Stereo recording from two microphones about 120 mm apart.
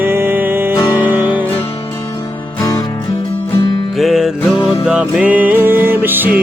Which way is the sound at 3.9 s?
Centre (ahead or behind).